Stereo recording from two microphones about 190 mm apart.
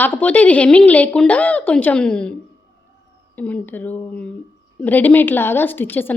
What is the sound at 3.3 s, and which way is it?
A woman's voice, 10° left (ahead or behind).